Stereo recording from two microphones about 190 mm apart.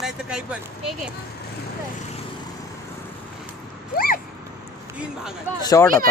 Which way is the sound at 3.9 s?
50° left (ahead or behind).